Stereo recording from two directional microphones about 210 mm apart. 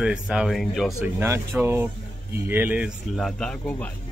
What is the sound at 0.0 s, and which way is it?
Speech, 5° right (ahead or behind).